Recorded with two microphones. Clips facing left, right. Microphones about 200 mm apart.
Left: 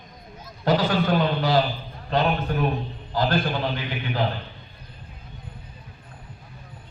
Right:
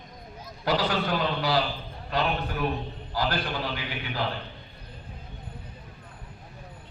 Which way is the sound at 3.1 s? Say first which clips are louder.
Left 5 dB; 50° left (ahead or behind).